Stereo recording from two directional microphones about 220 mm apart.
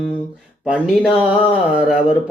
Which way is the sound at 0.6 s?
Centre (ahead or behind).